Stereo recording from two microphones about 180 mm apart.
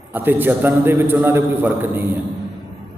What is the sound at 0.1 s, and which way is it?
A man's voice, 10° right (ahead or behind).